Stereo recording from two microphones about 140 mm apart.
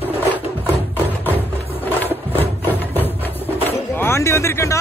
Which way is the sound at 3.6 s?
15° left (ahead or behind).